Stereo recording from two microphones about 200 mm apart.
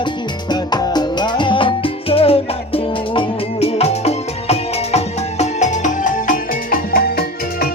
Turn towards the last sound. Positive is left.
turn(degrees=50)  # may be behind; listen again after turning